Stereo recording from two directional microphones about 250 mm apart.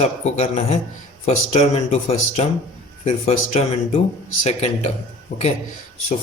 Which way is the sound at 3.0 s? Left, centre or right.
Left.